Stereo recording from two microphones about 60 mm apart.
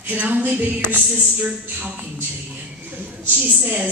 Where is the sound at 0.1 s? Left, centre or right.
Right.